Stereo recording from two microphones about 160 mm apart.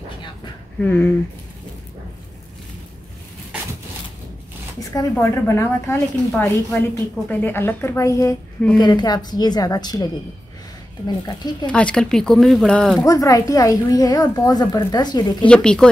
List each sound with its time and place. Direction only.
0.7 s a woman's voice: 10° left (ahead or behind)
5.2 s a woman's voice: 15° left (ahead or behind)
11.6 s speech: 5° left (ahead or behind)
13.0 s a woman's voice: 20° left (ahead or behind)
15.4 s speech: 5° left (ahead or behind)